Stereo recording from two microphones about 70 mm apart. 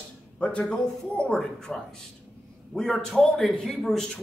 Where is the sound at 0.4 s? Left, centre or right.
Centre.